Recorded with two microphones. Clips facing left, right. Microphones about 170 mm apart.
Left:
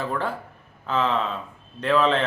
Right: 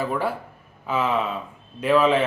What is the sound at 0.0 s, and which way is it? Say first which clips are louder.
Speech: right 2 dB; 10° right (ahead or behind).